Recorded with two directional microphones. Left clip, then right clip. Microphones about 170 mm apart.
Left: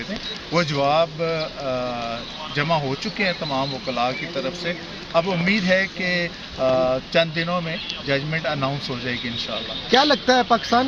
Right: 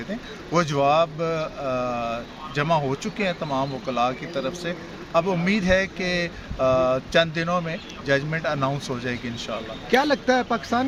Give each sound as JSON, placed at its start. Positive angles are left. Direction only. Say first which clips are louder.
{"t": 0.5, "sound": "speech", "louder": "even", "side_deg": -15}
{"t": 9.9, "sound": "a man's voice", "louder": "left 3 dB", "side_deg": 50}